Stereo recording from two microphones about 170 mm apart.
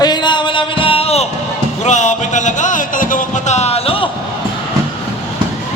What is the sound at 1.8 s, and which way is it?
Speech, 45° left (ahead or behind).